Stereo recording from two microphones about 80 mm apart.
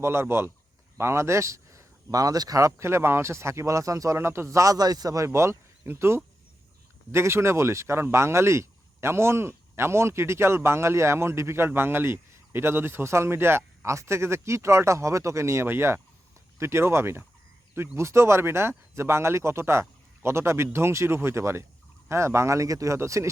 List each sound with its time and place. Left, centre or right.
0.0 s speech: right